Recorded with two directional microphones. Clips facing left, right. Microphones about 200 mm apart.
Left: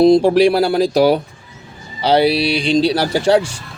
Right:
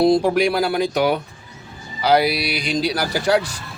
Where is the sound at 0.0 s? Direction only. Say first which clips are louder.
Left 6 dB; 25° left (ahead or behind).